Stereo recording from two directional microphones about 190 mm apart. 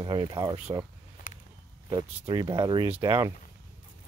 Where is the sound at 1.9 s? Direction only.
20° right (ahead or behind).